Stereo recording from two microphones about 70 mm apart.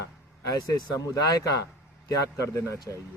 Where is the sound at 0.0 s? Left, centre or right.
Left.